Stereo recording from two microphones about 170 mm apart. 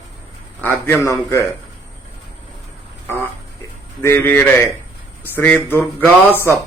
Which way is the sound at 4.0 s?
15° left (ahead or behind).